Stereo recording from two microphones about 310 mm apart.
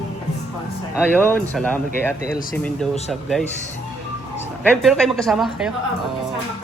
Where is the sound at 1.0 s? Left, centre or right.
Centre.